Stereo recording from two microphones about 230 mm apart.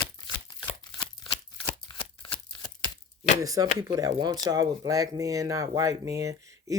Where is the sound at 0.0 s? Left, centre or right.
Centre.